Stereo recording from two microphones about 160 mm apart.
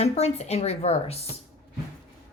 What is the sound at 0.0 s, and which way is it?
A woman's voice, 40° left (ahead or behind).